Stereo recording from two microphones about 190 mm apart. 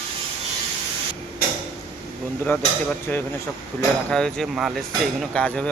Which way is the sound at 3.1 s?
10° left (ahead or behind).